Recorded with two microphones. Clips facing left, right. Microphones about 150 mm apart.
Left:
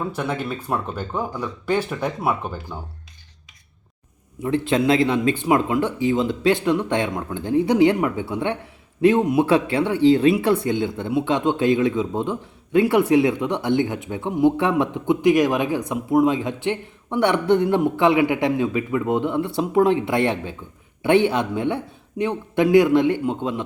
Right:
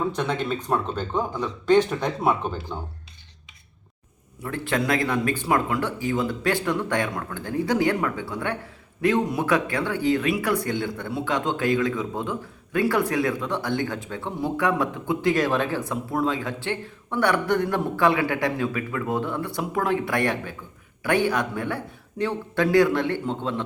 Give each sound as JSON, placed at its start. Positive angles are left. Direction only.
{"t": 0.1, "sound": "speech", "side_deg": 10}
{"t": 4.4, "sound": "speech", "side_deg": 20}